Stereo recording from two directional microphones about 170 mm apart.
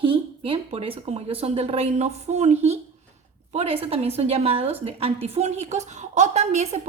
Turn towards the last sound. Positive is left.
turn(degrees=-40)  # may be behind; listen again after turning